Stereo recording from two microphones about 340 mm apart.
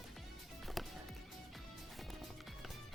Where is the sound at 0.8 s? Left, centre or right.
Centre.